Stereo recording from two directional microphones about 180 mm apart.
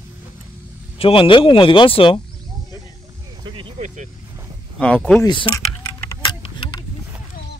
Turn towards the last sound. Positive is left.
turn(degrees=30)  # may be behind; listen again after turning